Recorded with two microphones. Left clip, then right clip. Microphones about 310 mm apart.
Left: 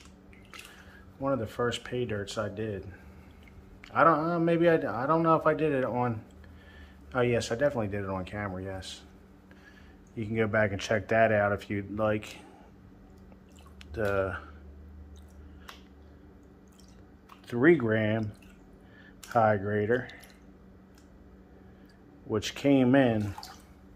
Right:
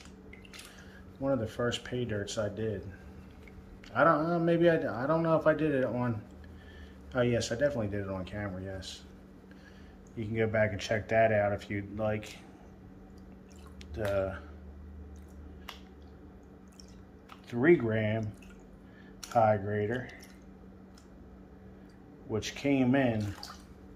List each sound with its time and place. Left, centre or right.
1.2 s a man's voice: centre
3.8 s a man's voice: centre
10.1 s a man's voice: centre
13.9 s a man's voice: centre
17.5 s a man's voice: centre
19.3 s a man's voice: centre
22.3 s a man's voice: centre